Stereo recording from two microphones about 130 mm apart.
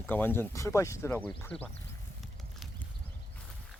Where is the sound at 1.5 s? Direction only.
5° left (ahead or behind).